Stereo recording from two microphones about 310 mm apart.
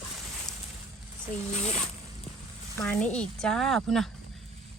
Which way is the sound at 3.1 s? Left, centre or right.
Centre.